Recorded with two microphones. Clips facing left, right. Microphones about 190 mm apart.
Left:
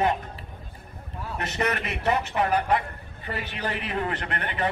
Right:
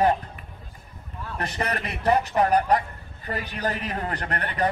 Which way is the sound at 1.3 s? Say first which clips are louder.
Left 1 dB; 35° right (ahead or behind).